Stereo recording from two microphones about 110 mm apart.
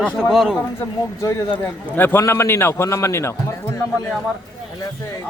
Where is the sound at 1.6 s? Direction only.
20° left (ahead or behind).